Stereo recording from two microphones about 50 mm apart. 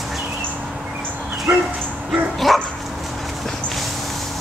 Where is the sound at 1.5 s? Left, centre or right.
Right.